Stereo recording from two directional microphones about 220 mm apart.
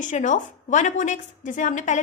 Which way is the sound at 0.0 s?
35° left (ahead or behind).